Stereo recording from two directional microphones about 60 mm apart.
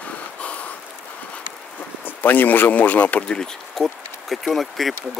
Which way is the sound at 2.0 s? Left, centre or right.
Left.